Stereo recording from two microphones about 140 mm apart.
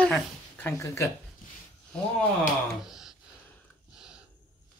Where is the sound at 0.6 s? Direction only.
20° left (ahead or behind).